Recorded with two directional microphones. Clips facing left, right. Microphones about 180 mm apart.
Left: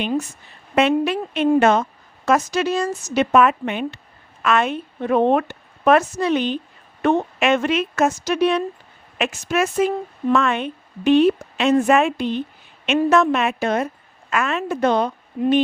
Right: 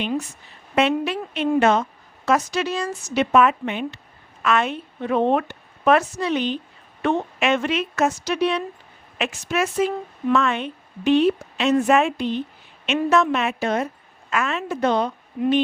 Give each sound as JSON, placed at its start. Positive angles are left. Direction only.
{"t": 0.8, "sound": "a woman's voice", "side_deg": 50}